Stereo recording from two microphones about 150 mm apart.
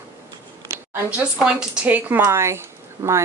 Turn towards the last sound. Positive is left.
turn(degrees=-15)  # may be behind; listen again after turning